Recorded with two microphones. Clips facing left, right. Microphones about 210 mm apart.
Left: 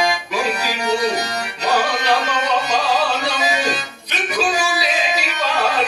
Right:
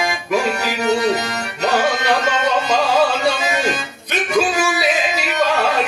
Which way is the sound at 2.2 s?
50° right (ahead or behind).